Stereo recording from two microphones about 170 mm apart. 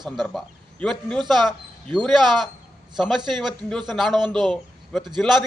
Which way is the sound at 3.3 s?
Centre (ahead or behind).